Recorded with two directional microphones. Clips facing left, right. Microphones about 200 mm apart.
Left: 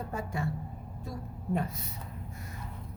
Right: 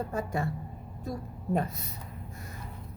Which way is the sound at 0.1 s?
40° right (ahead or behind).